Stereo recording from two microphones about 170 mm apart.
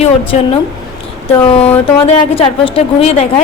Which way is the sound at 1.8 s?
30° left (ahead or behind).